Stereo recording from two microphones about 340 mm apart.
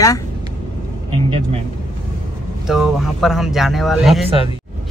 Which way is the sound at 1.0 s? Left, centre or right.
Centre.